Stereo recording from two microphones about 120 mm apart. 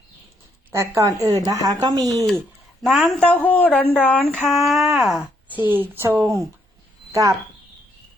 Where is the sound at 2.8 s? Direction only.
Centre (ahead or behind).